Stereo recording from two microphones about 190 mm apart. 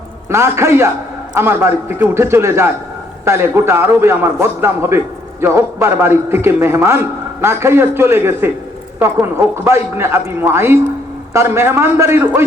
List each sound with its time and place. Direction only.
0.3 s a man's voice: 15° right (ahead or behind)